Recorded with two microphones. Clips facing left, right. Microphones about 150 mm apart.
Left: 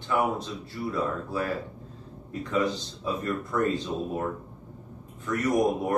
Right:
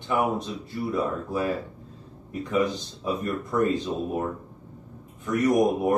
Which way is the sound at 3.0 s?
20° right (ahead or behind).